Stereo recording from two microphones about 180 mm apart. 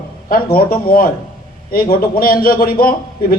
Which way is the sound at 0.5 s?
55° left (ahead or behind).